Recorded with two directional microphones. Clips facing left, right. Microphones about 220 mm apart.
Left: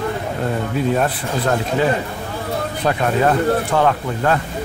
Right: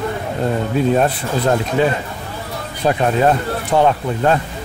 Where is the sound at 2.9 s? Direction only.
20° right (ahead or behind).